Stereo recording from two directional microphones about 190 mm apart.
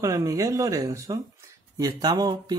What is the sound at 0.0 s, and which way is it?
Speech, 15° right (ahead or behind).